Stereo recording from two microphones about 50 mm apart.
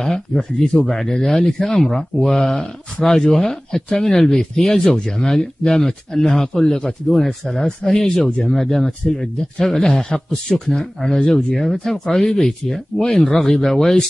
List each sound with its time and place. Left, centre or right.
0.0 s speech: centre
8.5 s speech: centre